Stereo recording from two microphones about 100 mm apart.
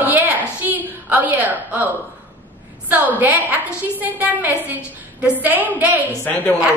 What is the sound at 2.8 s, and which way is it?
A woman's voice, 15° right (ahead or behind).